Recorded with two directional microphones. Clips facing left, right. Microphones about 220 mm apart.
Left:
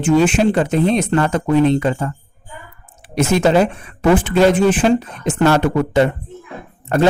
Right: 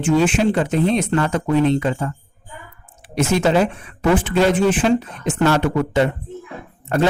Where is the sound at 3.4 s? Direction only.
45° left (ahead or behind).